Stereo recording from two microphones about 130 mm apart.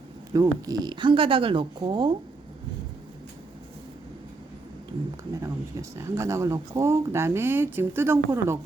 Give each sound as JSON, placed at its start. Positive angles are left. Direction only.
{"t": 0.3, "sound": "speech", "side_deg": -30}
{"t": 5.3, "sound": "speech", "side_deg": -25}